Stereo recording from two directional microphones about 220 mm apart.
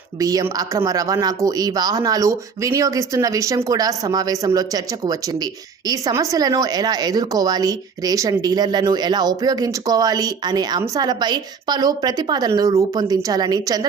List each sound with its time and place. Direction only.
0.2 s a woman's voice: 15° right (ahead or behind)